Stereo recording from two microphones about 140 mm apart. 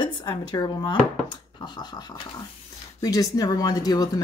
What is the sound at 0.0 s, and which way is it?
Speech, 30° left (ahead or behind).